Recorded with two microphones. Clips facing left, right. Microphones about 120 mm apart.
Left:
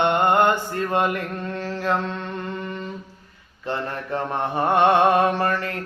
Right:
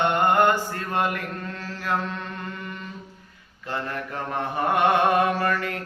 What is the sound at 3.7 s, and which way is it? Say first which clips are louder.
Mantra: left 3 dB; 30° left (ahead or behind).